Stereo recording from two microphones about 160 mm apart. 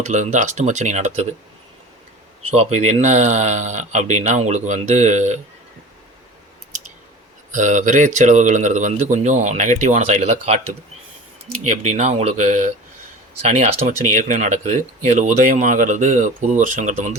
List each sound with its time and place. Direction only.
0.0 s speech: 50° right (ahead or behind)
2.5 s speech: 45° right (ahead or behind)
7.5 s speech: 50° right (ahead or behind)
11.7 s speech: 45° right (ahead or behind)